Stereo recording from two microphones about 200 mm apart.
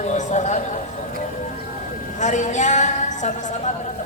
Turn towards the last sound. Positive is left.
turn(degrees=35)  # may be behind; listen again after turning